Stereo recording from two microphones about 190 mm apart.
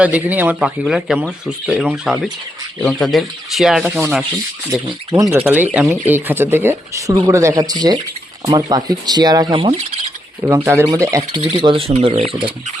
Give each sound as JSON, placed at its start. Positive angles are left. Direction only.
{"t": 0.0, "sound": "speech", "side_deg": -10}
{"t": 5.1, "sound": "speech", "side_deg": -20}